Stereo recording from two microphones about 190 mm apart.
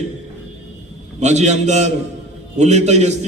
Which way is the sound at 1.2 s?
35° right (ahead or behind).